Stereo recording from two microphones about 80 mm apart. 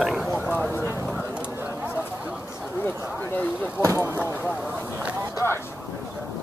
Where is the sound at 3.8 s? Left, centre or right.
Right.